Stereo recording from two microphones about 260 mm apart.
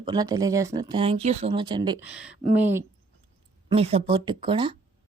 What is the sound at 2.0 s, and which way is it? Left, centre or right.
Speech, centre.